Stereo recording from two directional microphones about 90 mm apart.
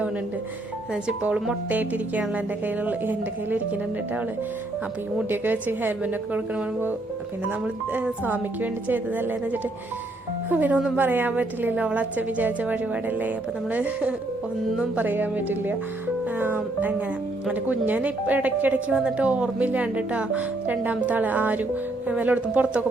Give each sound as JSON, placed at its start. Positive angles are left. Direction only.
{"t": 1.0, "sound": "a woman's voice", "side_deg": -10}
{"t": 5.3, "sound": "a woman's voice", "side_deg": -20}
{"t": 7.6, "sound": "a woman's voice", "side_deg": -15}